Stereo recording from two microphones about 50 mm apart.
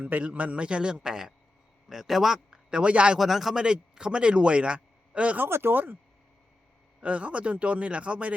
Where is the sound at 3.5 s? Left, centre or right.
Centre.